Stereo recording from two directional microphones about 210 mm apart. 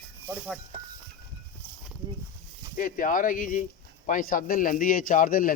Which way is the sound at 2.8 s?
40° left (ahead or behind).